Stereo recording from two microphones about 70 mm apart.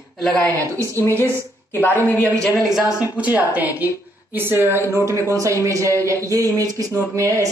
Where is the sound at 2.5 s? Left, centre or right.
Centre.